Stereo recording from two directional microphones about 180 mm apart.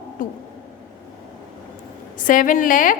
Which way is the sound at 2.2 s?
45° left (ahead or behind).